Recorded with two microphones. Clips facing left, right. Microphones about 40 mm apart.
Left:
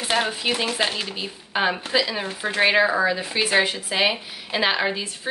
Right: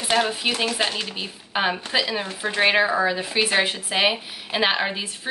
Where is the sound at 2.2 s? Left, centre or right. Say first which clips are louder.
Even; centre.